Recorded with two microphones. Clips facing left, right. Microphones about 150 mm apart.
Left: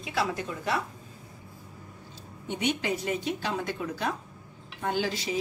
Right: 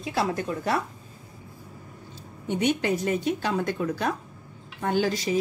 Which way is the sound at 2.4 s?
50° right (ahead or behind).